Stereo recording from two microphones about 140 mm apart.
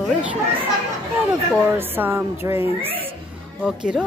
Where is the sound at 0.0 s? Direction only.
10° right (ahead or behind).